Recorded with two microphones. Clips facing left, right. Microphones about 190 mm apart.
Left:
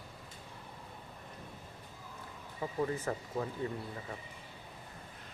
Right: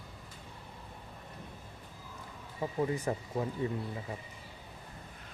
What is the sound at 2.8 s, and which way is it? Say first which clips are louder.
Speech: right 2 dB; 15° right (ahead or behind).